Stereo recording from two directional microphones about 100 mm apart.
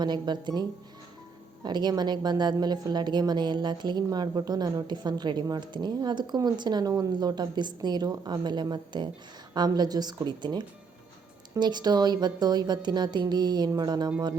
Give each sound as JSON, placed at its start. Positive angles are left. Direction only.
{"t": 0.0, "sound": "a woman's voice", "side_deg": -45}